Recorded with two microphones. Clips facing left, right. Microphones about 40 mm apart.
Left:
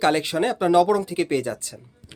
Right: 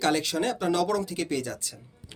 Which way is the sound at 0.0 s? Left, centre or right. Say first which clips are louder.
Left 5 dB; left.